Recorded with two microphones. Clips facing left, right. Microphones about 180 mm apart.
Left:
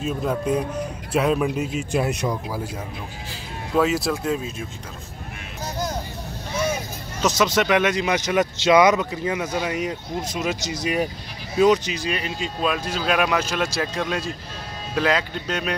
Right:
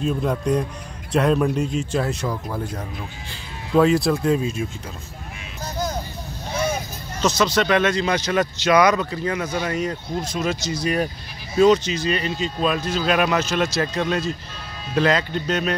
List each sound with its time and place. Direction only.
0.0 s speech: centre (ahead or behind)
3.7 s speech: 5° left (ahead or behind)
7.2 s speech: 15° left (ahead or behind)